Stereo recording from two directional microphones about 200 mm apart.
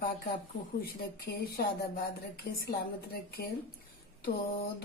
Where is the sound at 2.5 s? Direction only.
50° left (ahead or behind).